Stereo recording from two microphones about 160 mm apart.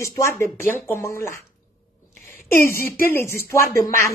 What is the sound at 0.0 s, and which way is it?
Speech, 15° left (ahead or behind).